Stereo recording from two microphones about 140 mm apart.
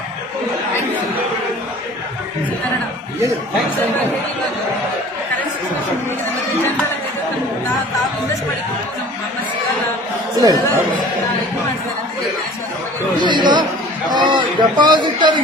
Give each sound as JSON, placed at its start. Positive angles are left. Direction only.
{"t": 10.3, "sound": "speech", "side_deg": -30}
{"t": 13.2, "sound": "chatter", "side_deg": -30}